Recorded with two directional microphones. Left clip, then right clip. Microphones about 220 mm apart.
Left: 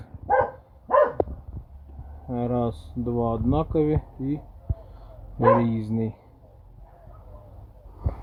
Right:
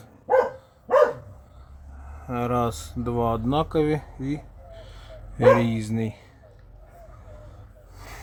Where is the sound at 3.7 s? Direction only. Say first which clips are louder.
Even; centre (ahead or behind).